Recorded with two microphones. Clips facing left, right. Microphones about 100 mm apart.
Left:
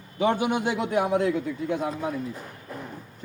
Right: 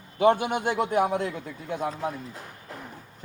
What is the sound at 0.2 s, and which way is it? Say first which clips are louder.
Speech: right 2 dB; 55° right (ahead or behind).